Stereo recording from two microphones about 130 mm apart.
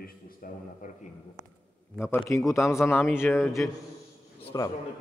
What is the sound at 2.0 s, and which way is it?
Speech, 20° left (ahead or behind).